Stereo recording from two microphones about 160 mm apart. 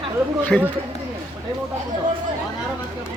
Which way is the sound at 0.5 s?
Centre (ahead or behind).